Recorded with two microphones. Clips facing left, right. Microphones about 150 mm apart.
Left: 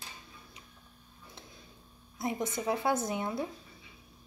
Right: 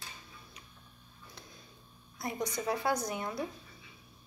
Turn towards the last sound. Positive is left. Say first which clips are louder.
# left 3 dB
turn(degrees=20)  # may be behind; listen again after turning